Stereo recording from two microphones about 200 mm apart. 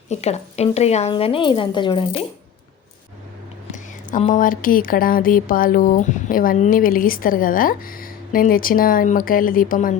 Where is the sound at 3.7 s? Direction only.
40° left (ahead or behind).